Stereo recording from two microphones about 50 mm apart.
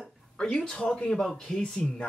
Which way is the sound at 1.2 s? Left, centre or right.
Centre.